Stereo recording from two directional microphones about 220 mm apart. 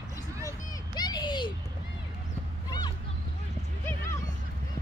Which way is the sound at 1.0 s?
20° left (ahead or behind).